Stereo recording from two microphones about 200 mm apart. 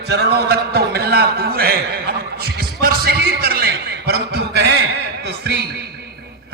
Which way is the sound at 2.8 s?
50° right (ahead or behind).